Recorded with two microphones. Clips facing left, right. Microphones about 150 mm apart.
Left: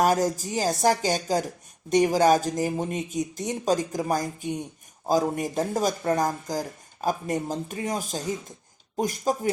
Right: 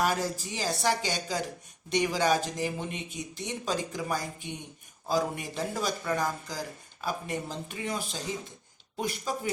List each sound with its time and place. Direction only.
0.0 s speech: 45° left (ahead or behind)